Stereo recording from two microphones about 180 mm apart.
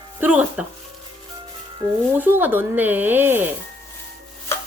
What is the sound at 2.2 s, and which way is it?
Speech, 10° right (ahead or behind).